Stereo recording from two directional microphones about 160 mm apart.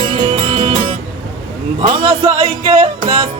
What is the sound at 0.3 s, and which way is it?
Music, 35° right (ahead or behind).